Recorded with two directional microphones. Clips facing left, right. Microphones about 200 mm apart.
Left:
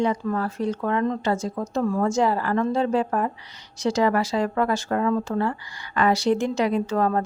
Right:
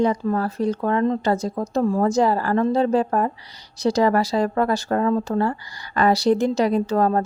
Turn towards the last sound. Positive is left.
turn(degrees=-35)  # may be behind; listen again after turning